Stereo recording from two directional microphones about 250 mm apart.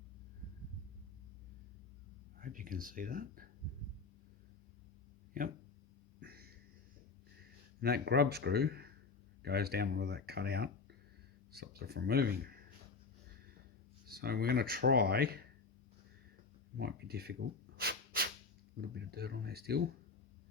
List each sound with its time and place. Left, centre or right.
2.4 s speech: right
6.1 s a sound: right
7.8 s speech: right
14.1 s speech: right
16.7 s speech: right
17.7 s a sound: right
18.8 s speech: right